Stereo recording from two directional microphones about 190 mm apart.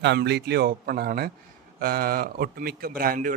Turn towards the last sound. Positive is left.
turn(degrees=-50)  # may be behind; listen again after turning